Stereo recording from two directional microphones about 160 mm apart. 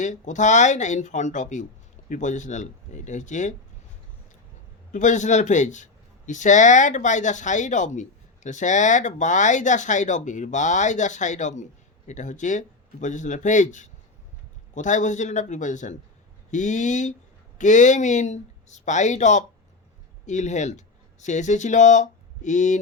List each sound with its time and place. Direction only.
0.0 s speech: 50° left (ahead or behind)
4.9 s speech: 50° left (ahead or behind)